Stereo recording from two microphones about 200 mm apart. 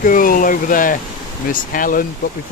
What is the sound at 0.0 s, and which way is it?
Speech, 45° left (ahead or behind).